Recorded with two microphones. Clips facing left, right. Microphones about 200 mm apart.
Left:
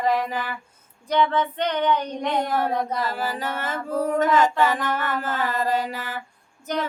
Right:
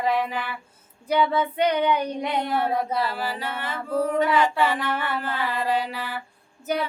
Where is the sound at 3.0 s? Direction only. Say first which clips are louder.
Even; 45° left (ahead or behind).